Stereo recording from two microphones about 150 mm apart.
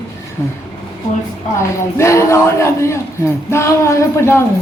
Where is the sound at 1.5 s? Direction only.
20° left (ahead or behind).